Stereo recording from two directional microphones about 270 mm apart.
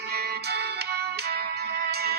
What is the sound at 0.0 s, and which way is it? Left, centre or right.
Music, right.